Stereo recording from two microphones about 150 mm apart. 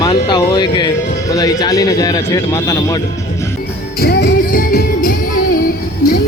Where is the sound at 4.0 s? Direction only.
90° left; by 5.7 s 70° left (ahead or behind).